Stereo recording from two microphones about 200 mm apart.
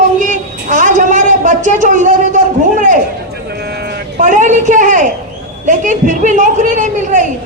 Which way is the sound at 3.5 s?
55° right (ahead or behind).